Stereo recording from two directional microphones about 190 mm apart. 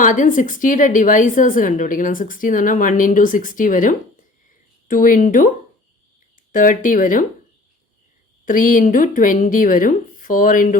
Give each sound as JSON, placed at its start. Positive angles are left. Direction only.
{"t": 0.0, "sound": "a woman's voice", "side_deg": 45}
{"t": 6.5, "sound": "a woman's voice", "side_deg": 45}
{"t": 8.4, "sound": "a woman's voice", "side_deg": 45}